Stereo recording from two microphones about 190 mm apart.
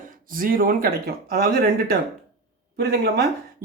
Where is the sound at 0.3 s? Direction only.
50° right (ahead or behind).